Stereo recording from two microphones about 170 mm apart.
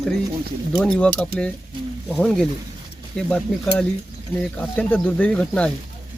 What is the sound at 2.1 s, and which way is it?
Speech, centre (ahead or behind).